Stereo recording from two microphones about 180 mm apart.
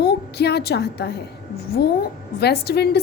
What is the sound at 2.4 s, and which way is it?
Speech, 65° left (ahead or behind).